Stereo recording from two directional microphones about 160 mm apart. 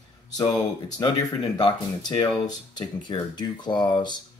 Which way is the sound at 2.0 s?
25° left (ahead or behind).